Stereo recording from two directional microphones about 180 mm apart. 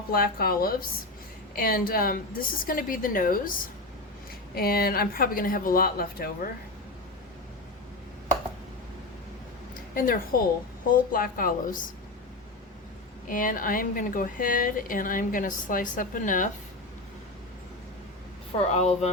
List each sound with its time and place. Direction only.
0.1 s a woman's voice: 55° left (ahead or behind)
9.9 s a woman's voice: 50° left (ahead or behind)
13.2 s a woman's voice: 50° left (ahead or behind)
18.7 s speech: 40° left (ahead or behind)